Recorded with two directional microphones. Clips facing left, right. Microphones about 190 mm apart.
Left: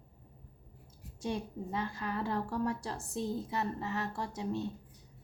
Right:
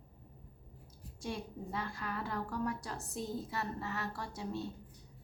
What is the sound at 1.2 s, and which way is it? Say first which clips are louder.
A woman's voice: left 4 dB; 20° left (ahead or behind).